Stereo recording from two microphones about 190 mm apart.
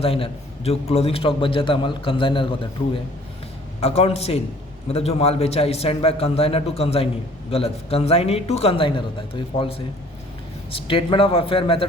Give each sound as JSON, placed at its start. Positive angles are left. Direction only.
{"t": 0.0, "sound": "a man's voice", "side_deg": 30}